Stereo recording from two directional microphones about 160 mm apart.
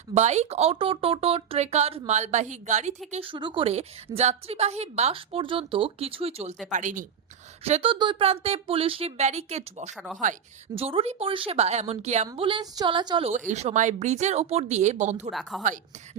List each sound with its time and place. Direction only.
0.1 s speech: 45° right (ahead or behind)
3.1 s a woman's voice: 35° right (ahead or behind); by 7.0 s 50° right (ahead or behind)
7.6 s a woman's voice: 40° right (ahead or behind)
9.9 s a woman's voice: centre (ahead or behind)
10.8 s a woman's voice: 40° right (ahead or behind)
12.4 s a woman's voice: 30° right (ahead or behind)
13.5 s speech: 45° right (ahead or behind)
15.3 s a woman's voice: centre (ahead or behind)